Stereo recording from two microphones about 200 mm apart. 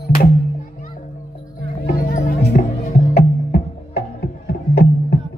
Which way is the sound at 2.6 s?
40° left (ahead or behind).